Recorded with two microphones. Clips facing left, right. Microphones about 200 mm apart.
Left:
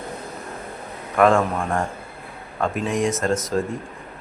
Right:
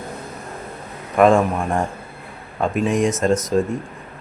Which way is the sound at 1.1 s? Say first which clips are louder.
Right 3 dB; 20° right (ahead or behind).